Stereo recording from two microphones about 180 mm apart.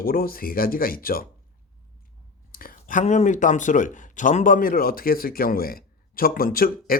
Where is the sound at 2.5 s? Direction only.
55° left (ahead or behind).